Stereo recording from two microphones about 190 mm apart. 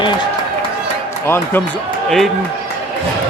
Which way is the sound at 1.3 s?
10° left (ahead or behind).